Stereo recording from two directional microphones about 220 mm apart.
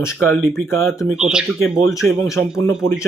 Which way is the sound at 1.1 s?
5° right (ahead or behind).